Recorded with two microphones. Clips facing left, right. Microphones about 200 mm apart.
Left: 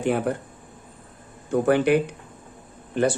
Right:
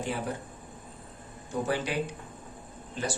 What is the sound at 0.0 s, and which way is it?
Speech, 60° left (ahead or behind).